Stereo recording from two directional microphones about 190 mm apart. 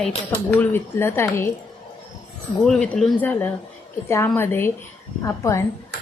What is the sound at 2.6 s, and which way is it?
A woman's voice, 5° left (ahead or behind).